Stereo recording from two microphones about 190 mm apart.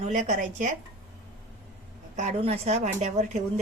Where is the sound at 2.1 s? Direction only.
35° right (ahead or behind).